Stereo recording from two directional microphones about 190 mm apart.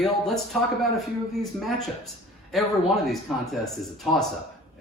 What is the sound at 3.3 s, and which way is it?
Speech, centre (ahead or behind).